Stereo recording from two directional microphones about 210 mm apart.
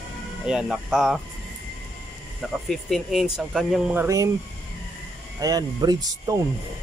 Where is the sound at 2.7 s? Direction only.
Centre (ahead or behind).